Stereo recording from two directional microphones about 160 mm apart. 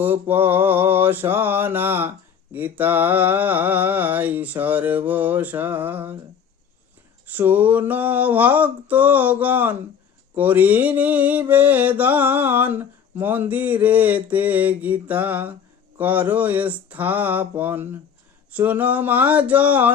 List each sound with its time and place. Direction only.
0.0 s mantra: 10° right (ahead or behind)
7.3 s mantra: 10° right (ahead or behind)